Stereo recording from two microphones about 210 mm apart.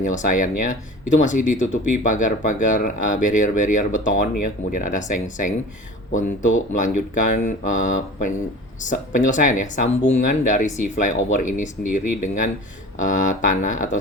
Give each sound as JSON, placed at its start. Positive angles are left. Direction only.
{"t": 0.0, "sound": "speech", "side_deg": 35}